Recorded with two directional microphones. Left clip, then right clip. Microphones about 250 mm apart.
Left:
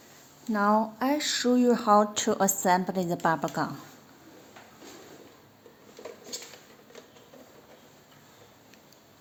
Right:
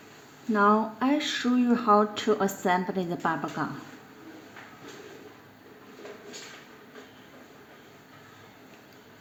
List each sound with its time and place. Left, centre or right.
0.5 s speech: left